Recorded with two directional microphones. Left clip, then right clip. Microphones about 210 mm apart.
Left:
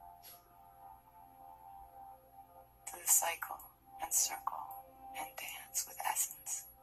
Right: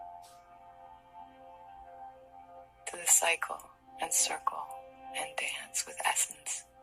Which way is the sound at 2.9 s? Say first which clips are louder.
Right 7 dB; 35° right (ahead or behind).